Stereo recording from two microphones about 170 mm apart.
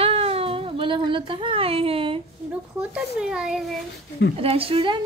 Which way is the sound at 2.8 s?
5° right (ahead or behind).